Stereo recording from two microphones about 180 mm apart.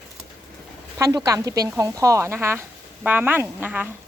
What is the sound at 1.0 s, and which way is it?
A woman's voice, 20° right (ahead or behind).